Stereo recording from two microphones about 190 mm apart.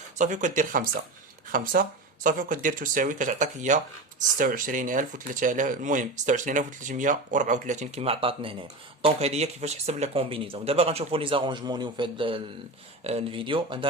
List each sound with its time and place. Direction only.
0.2 s speech: 40° right (ahead or behind)